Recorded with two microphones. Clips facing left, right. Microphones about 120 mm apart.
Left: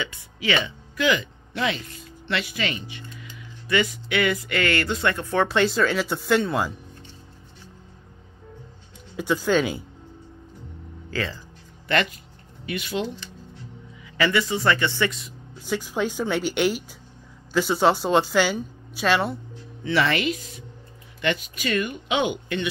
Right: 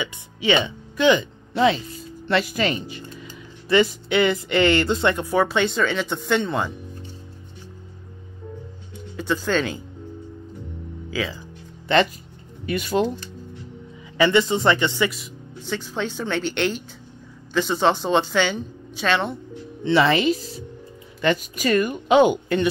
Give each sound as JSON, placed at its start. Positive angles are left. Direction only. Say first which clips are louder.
{"t": 0.0, "sound": "speech", "louder": "right 4 dB", "side_deg": -20}
{"t": 5.1, "sound": "speech", "louder": "right 2 dB", "side_deg": -10}
{"t": 9.1, "sound": "a woman's voice", "louder": "left 1 dB", "side_deg": 10}
{"t": 11.1, "sound": "speech", "louder": "right 2 dB", "side_deg": -10}
{"t": 11.9, "sound": "speech", "louder": "right 5 dB", "side_deg": -25}
{"t": 12.6, "sound": "speech", "louder": "right 6 dB", "side_deg": -45}
{"t": 14.1, "sound": "speech", "louder": "right 5 dB", "side_deg": -25}
{"t": 15.0, "sound": "speech", "louder": "even", "side_deg": -5}
{"t": 15.6, "sound": "a woman's voice", "louder": "left 2 dB", "side_deg": 10}
{"t": 19.8, "sound": "speech", "louder": "right 5 dB", "side_deg": -30}